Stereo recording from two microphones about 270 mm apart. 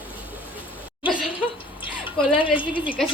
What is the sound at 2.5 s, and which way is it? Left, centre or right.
Speech, centre.